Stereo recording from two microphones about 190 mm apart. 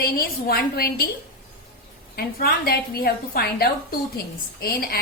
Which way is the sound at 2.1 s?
55° left (ahead or behind).